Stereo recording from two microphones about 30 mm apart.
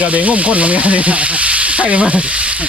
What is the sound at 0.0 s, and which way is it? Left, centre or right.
Speech, right.